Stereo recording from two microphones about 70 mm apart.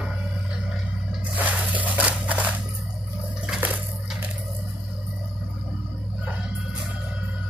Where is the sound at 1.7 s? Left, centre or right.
Right.